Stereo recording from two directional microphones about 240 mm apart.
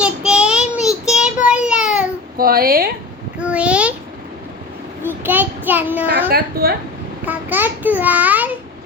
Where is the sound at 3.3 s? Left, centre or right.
Centre.